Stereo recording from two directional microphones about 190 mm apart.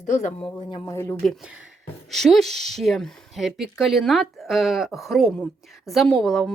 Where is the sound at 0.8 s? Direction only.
15° left (ahead or behind).